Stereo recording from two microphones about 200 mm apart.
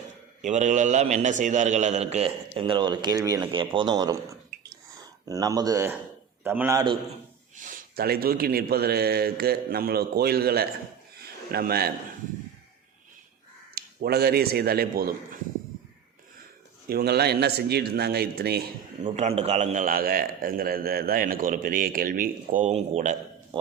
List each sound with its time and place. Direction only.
0.4 s a man's voice: 35° right (ahead or behind); by 4.2 s 20° right (ahead or behind)
5.2 s a man's voice: 15° right (ahead or behind)
7.5 s a man's voice: 40° right (ahead or behind)
13.7 s a man's voice: 50° right (ahead or behind)
16.9 s a man's voice: 50° right (ahead or behind)
19.1 s a man's voice: 30° right (ahead or behind)